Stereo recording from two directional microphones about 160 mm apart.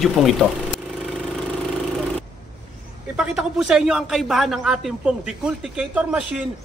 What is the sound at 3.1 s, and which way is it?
A woman's voice, 5° right (ahead or behind).